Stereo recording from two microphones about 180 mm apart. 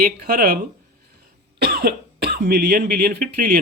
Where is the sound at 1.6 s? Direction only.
60° right (ahead or behind).